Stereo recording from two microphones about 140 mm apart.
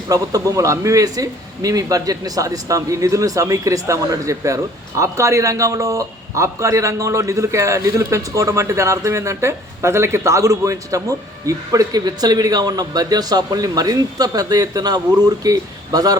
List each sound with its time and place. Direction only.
0.1 s a man's voice: 25° right (ahead or behind)